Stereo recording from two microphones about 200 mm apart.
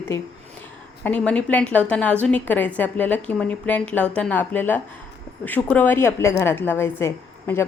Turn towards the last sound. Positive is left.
turn(degrees=10)  # may be behind; listen again after turning